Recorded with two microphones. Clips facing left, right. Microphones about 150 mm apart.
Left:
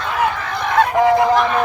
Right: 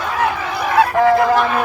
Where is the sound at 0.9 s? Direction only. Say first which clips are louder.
Left 1 dB; 20° left (ahead or behind).